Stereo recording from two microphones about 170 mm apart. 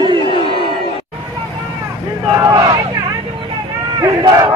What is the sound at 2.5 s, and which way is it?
Vehicle, 20° right (ahead or behind).